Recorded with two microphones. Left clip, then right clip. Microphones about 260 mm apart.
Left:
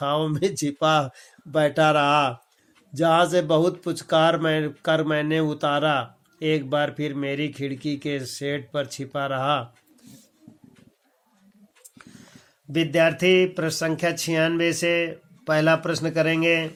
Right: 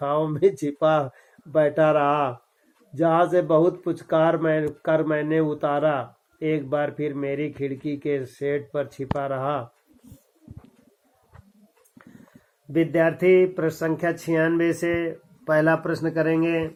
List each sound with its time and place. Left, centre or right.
0.0 s speech: left
12.7 s speech: left